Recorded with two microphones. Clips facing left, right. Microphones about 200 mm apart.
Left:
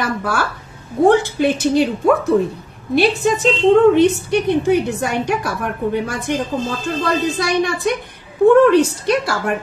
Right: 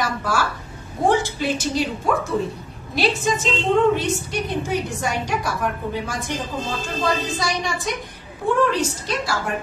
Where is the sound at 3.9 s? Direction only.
60° left (ahead or behind).